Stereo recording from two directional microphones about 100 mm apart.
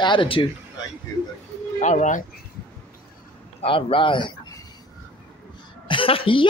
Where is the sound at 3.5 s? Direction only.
65° left (ahead or behind).